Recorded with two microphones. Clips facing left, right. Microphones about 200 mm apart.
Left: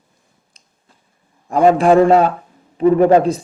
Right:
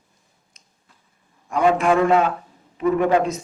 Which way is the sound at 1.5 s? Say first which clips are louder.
Left 6 dB; 35° left (ahead or behind).